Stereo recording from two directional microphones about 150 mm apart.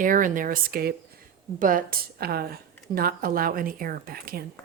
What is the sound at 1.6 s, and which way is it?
A woman's voice, 70° right (ahead or behind).